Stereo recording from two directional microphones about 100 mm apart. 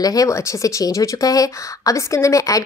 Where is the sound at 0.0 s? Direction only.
35° left (ahead or behind).